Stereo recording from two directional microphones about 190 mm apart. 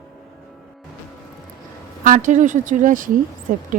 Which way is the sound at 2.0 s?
40° right (ahead or behind).